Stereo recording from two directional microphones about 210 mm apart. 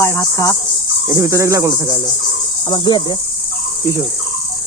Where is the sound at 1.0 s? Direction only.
15° right (ahead or behind).